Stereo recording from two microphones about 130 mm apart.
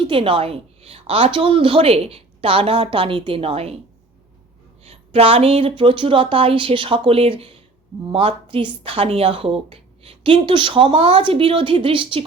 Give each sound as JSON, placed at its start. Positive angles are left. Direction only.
{"t": 0.0, "sound": "a woman's voice", "side_deg": -40}
{"t": 4.8, "sound": "a woman's voice", "side_deg": -50}